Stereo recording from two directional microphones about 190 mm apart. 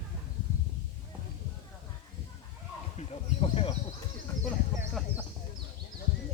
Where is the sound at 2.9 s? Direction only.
30° left (ahead or behind).